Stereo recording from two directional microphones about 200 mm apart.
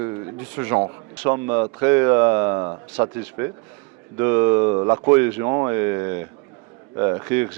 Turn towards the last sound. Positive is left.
turn(degrees=-15)  # may be behind; listen again after turning